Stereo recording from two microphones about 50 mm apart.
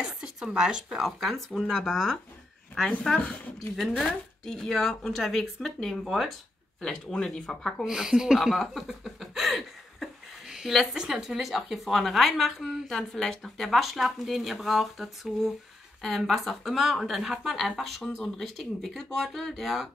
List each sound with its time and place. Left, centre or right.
0.0 s speech: centre
1.5 s speech: centre
3.2 s speech: left
3.9 s a woman's voice: centre
6.8 s a woman's voice: centre
7.8 s a woman's voice: centre